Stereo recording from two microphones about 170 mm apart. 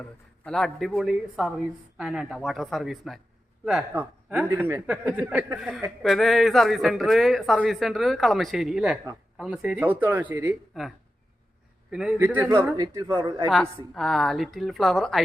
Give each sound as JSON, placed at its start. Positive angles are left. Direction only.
{"t": 0.0, "sound": "speech", "side_deg": 5}
{"t": 13.5, "sound": "speech", "side_deg": 0}